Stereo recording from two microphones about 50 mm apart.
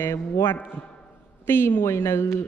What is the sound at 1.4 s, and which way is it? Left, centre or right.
Speech, left.